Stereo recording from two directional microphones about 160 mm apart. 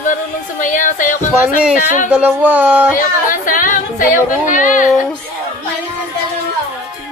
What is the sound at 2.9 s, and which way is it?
Speech, 60° left (ahead or behind).